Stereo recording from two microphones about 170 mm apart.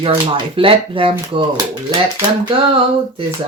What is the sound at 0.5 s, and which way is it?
Speech, 30° right (ahead or behind).